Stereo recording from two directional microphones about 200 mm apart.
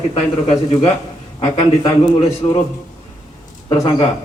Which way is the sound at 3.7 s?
25° left (ahead or behind).